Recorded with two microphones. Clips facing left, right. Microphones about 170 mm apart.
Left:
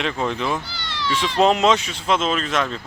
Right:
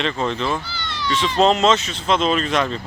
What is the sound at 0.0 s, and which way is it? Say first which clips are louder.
Speech: right 1 dB; 10° left (ahead or behind).